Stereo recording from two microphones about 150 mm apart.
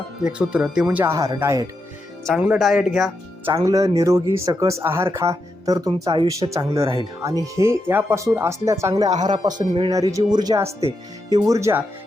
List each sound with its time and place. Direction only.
0.2 s speech: 5° right (ahead or behind)
2.2 s speech: 5° right (ahead or behind)
3.4 s speech: 20° right (ahead or behind)
9.9 s speech: 20° right (ahead or behind)